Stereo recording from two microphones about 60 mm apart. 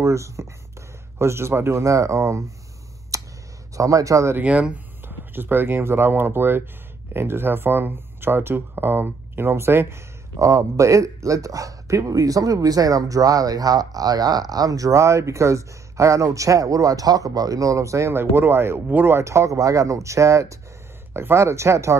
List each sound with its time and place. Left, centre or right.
0.0 s speech: right
3.1 s a sound: right
3.7 s a man's voice: right
4.4 s speech: right
5.0 s speech: right
18.1 s speech: right
19.1 s speech: right
21.1 s speech: right